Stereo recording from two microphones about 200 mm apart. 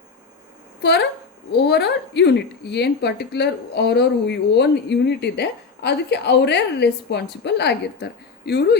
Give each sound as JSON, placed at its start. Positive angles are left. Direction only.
{"t": 0.8, "sound": "a woman's voice", "side_deg": 55}